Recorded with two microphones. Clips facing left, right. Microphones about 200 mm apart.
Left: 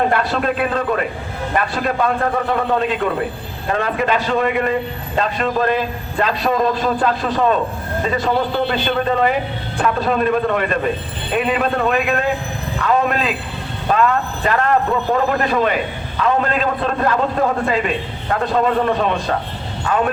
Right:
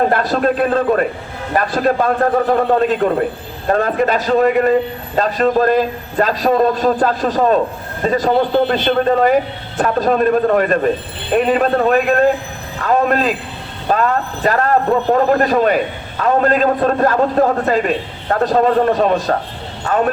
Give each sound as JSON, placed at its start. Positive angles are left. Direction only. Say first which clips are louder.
{"t": 0.1, "sound": "a man's voice", "louder": "right 3 dB", "side_deg": -40}